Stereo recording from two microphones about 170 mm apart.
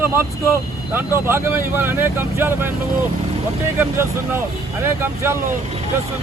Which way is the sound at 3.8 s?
15° right (ahead or behind).